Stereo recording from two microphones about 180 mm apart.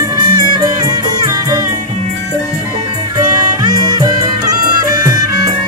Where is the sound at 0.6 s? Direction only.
20° right (ahead or behind).